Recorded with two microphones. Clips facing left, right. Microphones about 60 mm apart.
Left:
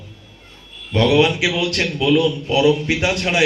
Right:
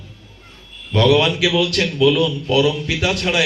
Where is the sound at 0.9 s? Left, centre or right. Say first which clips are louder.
Even; left.